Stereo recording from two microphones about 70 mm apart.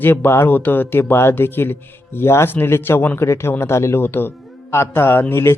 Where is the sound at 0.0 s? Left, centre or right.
Left.